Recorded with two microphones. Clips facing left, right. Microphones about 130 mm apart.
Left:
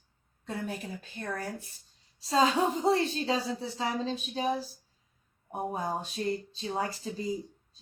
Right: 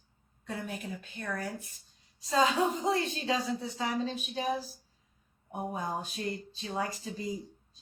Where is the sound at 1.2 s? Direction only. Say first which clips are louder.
Left 1 dB; 35° left (ahead or behind).